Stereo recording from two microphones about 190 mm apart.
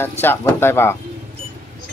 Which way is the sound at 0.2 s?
10° left (ahead or behind).